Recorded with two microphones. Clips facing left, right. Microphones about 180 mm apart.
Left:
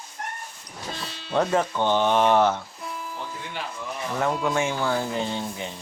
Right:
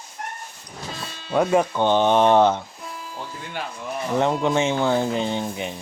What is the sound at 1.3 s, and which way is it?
Speech, 15° right (ahead or behind).